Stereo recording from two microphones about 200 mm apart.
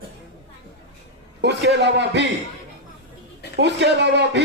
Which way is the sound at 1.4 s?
55° right (ahead or behind).